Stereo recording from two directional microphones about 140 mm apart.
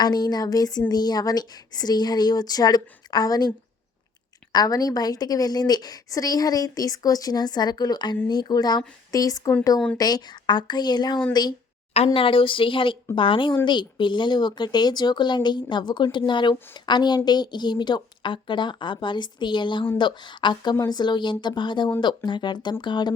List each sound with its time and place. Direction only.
0.0 s a woman's voice: 30° left (ahead or behind)
4.5 s a woman's voice: 25° left (ahead or behind)
11.9 s speech: 45° left (ahead or behind)